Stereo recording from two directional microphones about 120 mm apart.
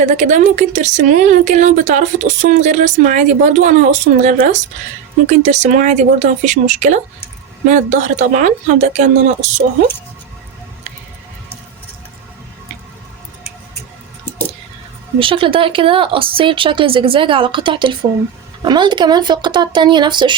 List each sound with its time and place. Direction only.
0.0 s speech: 90° right
15.2 s speech: 50° right (ahead or behind)